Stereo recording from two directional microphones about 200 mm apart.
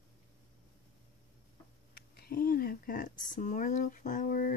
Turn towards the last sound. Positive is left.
turn(degrees=45)  # may be behind; listen again after turning